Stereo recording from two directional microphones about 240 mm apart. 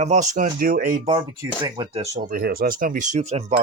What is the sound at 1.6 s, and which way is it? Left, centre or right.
Speech, right.